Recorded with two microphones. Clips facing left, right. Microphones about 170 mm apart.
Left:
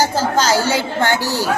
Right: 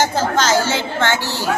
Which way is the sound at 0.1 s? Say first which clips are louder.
Even; 10° left (ahead or behind).